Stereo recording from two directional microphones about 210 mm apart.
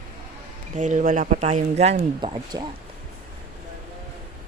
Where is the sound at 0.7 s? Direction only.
35° right (ahead or behind).